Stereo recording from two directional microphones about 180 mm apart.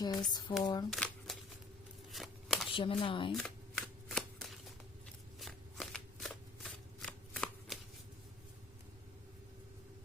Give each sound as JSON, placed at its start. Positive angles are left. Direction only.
{"t": 0.3, "sound": "speech", "side_deg": 25}
{"t": 0.9, "sound": "a sound", "side_deg": 5}
{"t": 2.1, "sound": "shuffling cards", "side_deg": 0}
{"t": 2.7, "sound": "speech", "side_deg": 30}
{"t": 3.3, "sound": "shuffling cards", "side_deg": 5}